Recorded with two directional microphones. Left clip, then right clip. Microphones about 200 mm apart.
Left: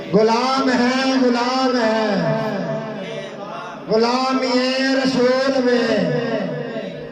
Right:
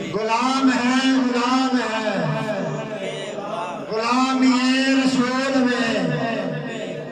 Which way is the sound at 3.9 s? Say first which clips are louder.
Left 3 dB; 30° left (ahead or behind).